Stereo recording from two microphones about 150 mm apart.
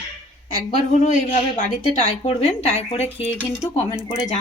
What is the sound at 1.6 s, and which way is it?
Speech, 55° left (ahead or behind).